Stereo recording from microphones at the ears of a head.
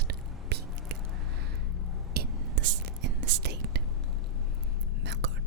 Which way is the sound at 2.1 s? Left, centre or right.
Right.